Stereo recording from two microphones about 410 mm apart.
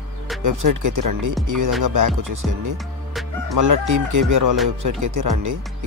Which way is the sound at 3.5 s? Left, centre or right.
Right.